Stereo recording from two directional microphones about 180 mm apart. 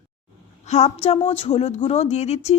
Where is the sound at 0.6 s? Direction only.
40° left (ahead or behind).